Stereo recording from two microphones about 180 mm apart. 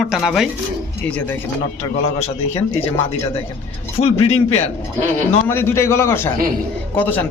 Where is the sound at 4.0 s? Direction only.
35° left (ahead or behind).